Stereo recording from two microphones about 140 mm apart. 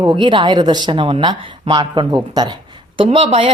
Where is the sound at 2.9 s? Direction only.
45° right (ahead or behind).